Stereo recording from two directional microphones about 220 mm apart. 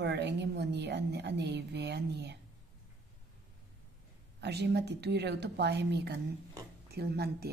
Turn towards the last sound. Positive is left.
turn(degrees=-45)  # may be behind; listen again after turning